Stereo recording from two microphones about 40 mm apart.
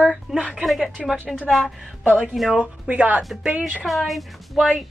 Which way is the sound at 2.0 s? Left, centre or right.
Right.